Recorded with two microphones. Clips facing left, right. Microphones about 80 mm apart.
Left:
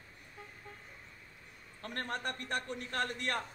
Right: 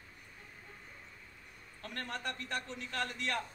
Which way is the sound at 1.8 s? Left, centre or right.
Left.